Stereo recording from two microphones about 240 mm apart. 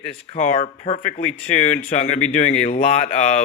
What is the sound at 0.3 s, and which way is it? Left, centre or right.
Speech, left.